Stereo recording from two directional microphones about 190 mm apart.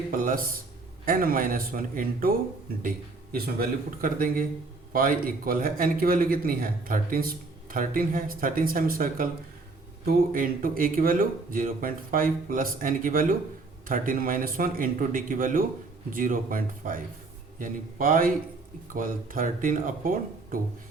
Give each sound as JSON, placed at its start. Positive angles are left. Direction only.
{"t": 0.1, "sound": "speech", "side_deg": -45}
{"t": 3.3, "sound": "speech", "side_deg": -50}